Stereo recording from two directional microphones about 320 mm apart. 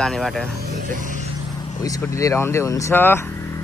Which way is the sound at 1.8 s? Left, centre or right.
Centre.